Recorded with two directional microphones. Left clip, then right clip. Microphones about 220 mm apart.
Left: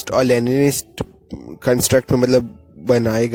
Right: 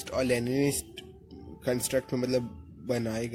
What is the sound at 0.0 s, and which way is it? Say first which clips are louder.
Speech: left 13 dB; 40° left (ahead or behind).